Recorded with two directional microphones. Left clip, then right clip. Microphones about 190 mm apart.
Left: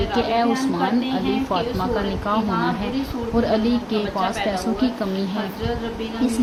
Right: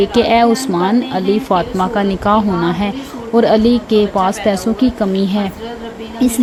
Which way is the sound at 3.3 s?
45° right (ahead or behind).